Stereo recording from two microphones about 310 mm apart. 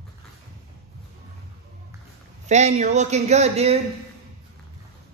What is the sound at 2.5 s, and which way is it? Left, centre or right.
A man's voice, right.